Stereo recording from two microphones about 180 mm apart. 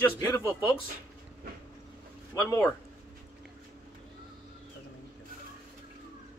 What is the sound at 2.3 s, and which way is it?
Speech, 15° left (ahead or behind).